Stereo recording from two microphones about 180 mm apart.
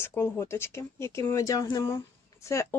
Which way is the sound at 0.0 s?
15° left (ahead or behind).